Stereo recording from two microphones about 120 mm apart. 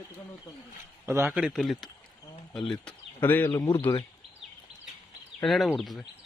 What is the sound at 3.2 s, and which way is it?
Speech, 15° left (ahead or behind).